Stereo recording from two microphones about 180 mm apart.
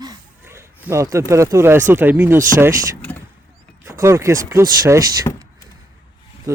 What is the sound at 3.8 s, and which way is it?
Speech, 15° right (ahead or behind).